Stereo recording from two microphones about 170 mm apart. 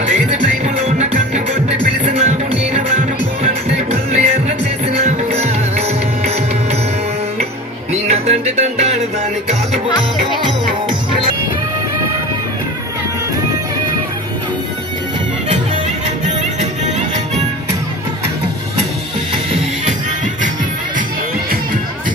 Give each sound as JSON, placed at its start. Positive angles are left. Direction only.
{"t": 0.7, "sound": "music", "side_deg": -40}
{"t": 7.9, "sound": "music", "side_deg": -40}